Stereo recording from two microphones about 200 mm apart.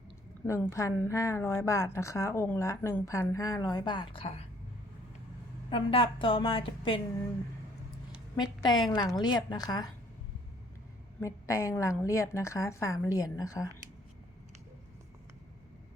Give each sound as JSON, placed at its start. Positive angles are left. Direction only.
{"t": 0.4, "sound": "a woman's voice", "side_deg": 15}
{"t": 5.7, "sound": "a woman's voice", "side_deg": 25}
{"t": 8.9, "sound": "a woman's voice", "side_deg": 20}
{"t": 11.2, "sound": "a woman's voice", "side_deg": 15}